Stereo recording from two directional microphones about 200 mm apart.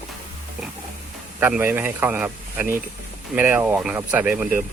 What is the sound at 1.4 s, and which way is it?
Speech, 10° right (ahead or behind).